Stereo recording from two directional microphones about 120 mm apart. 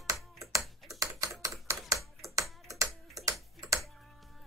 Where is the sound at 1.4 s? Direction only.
25° right (ahead or behind).